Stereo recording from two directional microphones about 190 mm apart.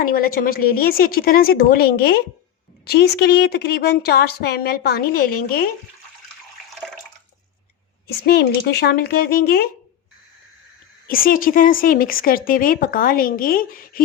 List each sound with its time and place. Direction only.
0.0 s a woman's voice: 50° left (ahead or behind)
8.0 s speech: 55° left (ahead or behind)
11.1 s speech: 50° left (ahead or behind)